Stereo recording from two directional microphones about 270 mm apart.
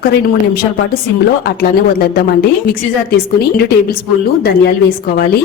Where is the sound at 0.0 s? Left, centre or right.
Left.